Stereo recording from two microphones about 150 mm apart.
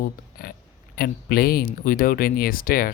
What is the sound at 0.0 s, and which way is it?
Speech, 80° left.